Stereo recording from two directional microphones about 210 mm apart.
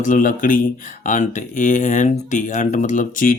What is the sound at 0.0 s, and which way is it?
Speech, 40° left (ahead or behind).